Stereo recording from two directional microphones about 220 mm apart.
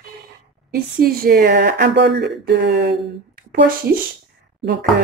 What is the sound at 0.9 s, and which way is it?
Speech, 45° right (ahead or behind).